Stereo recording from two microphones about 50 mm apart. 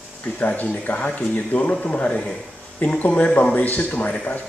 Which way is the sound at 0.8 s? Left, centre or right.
Left.